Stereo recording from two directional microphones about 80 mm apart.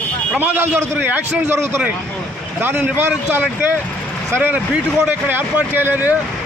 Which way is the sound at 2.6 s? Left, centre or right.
Right.